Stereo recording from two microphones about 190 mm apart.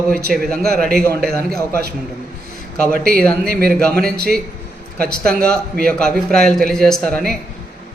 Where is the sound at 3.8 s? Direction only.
5° left (ahead or behind).